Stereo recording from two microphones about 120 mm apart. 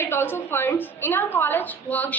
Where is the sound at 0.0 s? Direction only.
20° left (ahead or behind).